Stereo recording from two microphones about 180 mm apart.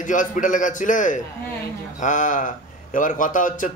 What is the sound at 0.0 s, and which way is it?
A man's voice, 45° left (ahead or behind).